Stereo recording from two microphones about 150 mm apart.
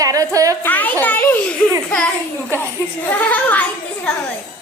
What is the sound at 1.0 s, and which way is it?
Giggle, 10° left (ahead or behind).